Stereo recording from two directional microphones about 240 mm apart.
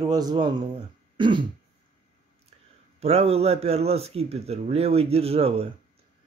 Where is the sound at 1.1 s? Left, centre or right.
Centre.